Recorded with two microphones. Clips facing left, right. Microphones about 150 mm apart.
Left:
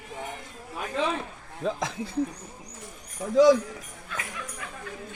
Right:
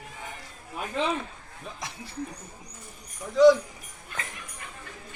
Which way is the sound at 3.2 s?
90° left.